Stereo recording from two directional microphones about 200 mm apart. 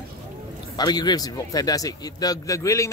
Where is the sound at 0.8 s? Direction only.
20° left (ahead or behind).